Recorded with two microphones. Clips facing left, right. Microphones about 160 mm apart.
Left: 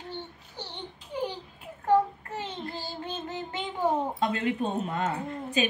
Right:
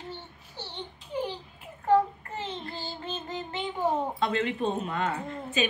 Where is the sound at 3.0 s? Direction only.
15° left (ahead or behind).